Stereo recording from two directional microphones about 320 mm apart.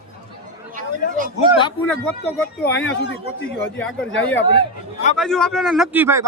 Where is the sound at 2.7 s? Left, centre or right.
Left.